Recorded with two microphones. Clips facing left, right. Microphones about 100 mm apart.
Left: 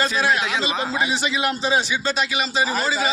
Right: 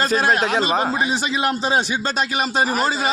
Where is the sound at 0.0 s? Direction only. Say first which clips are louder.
Right 3 dB; 45° right (ahead or behind).